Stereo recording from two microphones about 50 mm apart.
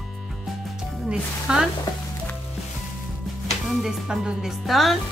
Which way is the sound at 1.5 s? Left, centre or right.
Centre.